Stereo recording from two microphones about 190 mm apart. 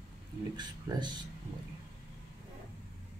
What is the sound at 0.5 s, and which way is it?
Speech, 25° right (ahead or behind).